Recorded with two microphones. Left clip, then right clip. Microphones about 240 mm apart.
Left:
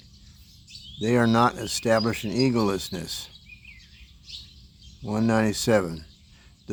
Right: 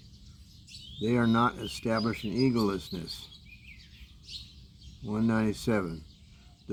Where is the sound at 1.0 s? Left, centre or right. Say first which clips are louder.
Left 6 dB; left.